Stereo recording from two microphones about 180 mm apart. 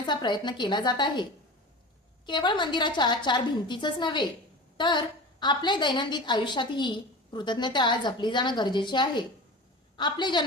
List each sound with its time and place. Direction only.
0.0 s a woman's voice: 25° left (ahead or behind)